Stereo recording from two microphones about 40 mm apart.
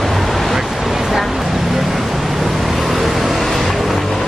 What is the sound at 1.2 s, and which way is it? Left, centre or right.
Vehicle, centre.